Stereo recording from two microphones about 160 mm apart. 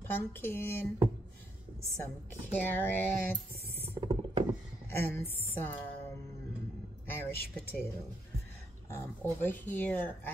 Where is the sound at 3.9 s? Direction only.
35° right (ahead or behind).